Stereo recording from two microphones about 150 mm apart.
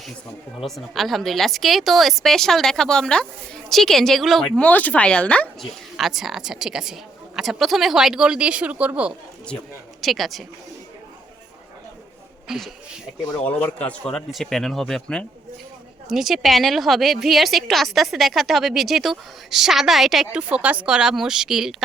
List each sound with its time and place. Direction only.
0.6 s a woman's voice: centre (ahead or behind)
12.5 s a woman's voice: centre (ahead or behind)